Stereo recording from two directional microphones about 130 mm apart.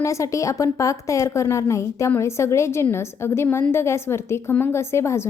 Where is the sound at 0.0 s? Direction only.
25° left (ahead or behind).